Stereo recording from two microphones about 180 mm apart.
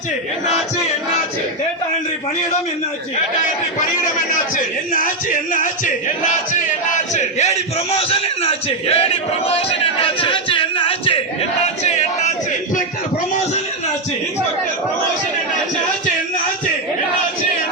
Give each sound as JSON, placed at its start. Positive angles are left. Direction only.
{"t": 4.5, "sound": "a man's voice", "side_deg": 50}
{"t": 9.5, "sound": "a sound", "side_deg": 30}
{"t": 11.6, "sound": "crowd", "side_deg": 40}